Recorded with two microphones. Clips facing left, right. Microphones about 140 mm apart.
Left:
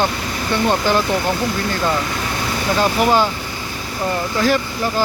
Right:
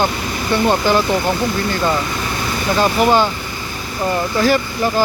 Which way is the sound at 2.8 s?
Centre (ahead or behind).